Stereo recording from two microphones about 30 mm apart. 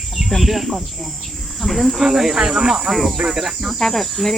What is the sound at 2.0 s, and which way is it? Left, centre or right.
Speech, centre.